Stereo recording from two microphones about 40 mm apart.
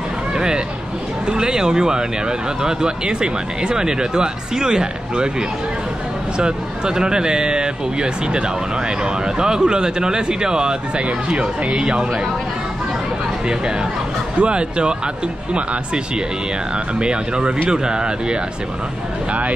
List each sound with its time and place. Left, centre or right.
1.2 s speech: centre
6.3 s speech: right
11.1 s speech: right
14.4 s speech: right
17.0 s speech: right